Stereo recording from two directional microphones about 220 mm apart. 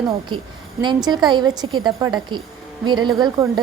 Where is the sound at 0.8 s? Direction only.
20° right (ahead or behind).